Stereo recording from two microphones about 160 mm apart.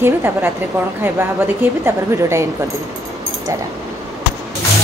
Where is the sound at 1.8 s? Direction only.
15° right (ahead or behind).